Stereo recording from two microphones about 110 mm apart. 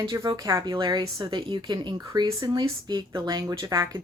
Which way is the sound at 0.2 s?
30° right (ahead or behind).